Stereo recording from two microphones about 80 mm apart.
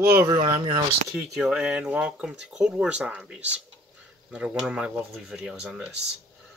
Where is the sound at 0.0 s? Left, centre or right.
Right.